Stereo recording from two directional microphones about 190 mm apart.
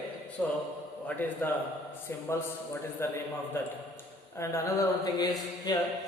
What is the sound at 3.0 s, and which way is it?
Speech, 15° left (ahead or behind).